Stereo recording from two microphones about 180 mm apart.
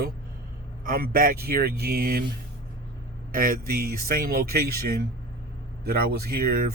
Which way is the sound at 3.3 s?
55° right (ahead or behind).